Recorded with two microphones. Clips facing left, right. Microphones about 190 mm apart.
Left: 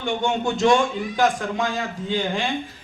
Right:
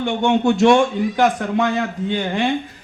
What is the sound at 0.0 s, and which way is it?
A man's voice, 65° right (ahead or behind).